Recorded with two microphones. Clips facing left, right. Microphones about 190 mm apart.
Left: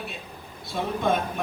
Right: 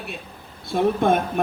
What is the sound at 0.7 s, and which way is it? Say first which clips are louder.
Speech: right 6 dB; 55° right (ahead or behind).